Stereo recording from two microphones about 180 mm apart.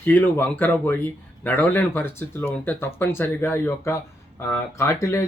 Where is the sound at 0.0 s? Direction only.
10° left (ahead or behind).